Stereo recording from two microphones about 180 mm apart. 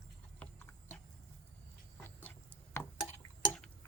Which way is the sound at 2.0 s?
10° left (ahead or behind).